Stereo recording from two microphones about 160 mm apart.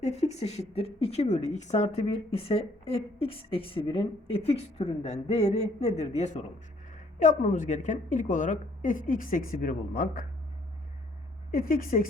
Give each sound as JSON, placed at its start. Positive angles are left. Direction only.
{"t": 0.0, "sound": "a woman's voice", "side_deg": 45}
{"t": 11.5, "sound": "speech", "side_deg": 60}